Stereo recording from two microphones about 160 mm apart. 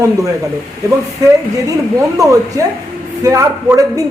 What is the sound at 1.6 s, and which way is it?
Speech, 20° right (ahead or behind).